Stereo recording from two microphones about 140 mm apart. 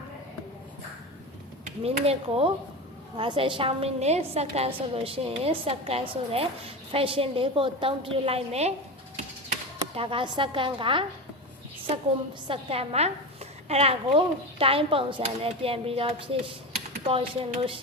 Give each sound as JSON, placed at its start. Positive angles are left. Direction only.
{"t": 1.6, "sound": "a woman's voice", "side_deg": -50}
{"t": 9.9, "sound": "a woman's voice", "side_deg": -40}
{"t": 12.5, "sound": "a woman's voice", "side_deg": -45}